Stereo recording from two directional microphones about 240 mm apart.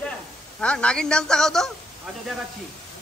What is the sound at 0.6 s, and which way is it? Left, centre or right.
A man's voice, centre.